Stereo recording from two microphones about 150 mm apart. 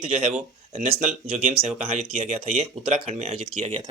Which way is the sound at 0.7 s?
55° right (ahead or behind).